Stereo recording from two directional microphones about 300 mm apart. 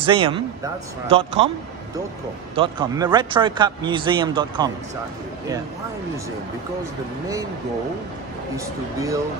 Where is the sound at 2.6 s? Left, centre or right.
Centre.